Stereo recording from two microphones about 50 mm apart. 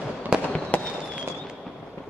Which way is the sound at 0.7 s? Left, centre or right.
Left.